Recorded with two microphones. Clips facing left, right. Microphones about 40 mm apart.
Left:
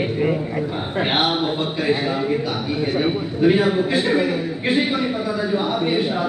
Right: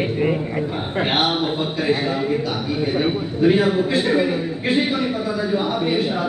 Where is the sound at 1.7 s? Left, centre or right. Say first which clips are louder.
Even; centre.